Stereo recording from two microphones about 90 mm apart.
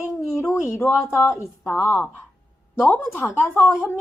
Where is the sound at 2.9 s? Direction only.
25° left (ahead or behind).